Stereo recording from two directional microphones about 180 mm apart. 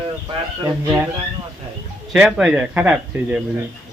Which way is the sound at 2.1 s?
5° right (ahead or behind).